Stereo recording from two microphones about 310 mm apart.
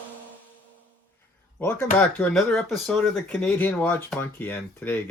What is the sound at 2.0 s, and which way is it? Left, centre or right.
Speech, centre.